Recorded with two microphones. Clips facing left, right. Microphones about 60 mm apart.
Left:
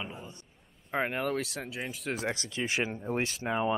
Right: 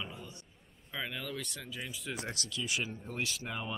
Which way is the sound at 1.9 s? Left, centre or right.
Left.